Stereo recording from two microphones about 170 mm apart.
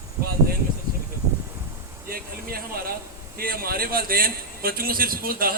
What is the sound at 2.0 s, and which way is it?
A man's voice, 60° right (ahead or behind).